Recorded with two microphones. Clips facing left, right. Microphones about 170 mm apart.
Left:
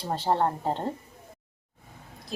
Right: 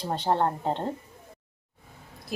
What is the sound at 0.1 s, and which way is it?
Speech, centre (ahead or behind).